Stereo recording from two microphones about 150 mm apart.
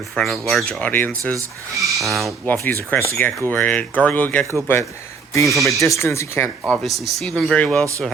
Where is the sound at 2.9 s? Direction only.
15° left (ahead or behind).